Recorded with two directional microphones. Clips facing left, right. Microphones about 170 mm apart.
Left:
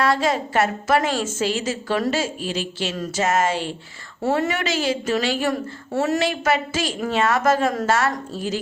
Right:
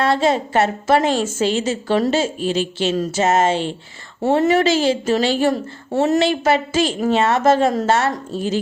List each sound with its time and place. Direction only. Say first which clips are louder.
0.0 s a woman's voice: right 3 dB; 25° right (ahead or behind)